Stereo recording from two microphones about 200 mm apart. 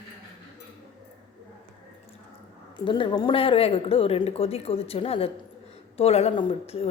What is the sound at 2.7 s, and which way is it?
A woman's voice, 25° left (ahead or behind).